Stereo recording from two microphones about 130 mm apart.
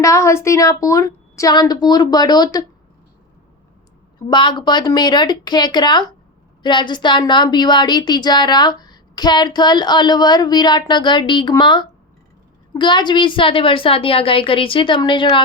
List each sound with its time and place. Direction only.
0.0 s a woman's voice: 25° left (ahead or behind)
4.3 s a woman's voice: 35° left (ahead or behind)